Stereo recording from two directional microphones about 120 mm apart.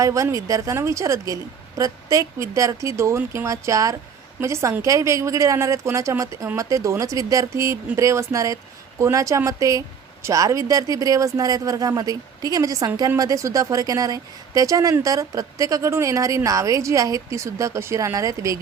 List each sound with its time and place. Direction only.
0.0 s speech: 25° right (ahead or behind)